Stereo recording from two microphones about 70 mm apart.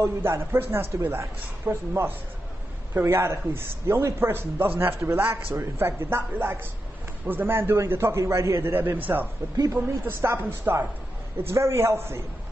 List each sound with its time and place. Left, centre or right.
0.0 s a man's voice: right
8.7 s a man's voice: right